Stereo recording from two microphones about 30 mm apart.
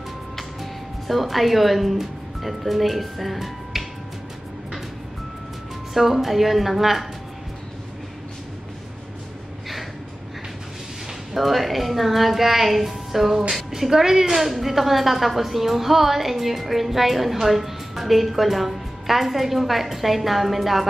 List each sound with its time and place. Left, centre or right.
0.4 s music: centre
2.4 s speech: centre
5.9 s a woman's voice: centre
11.3 s a woman's voice: centre
14.3 s a woman's voice: centre